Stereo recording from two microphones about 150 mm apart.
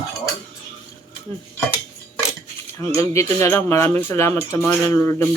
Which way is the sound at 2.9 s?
20° left (ahead or behind).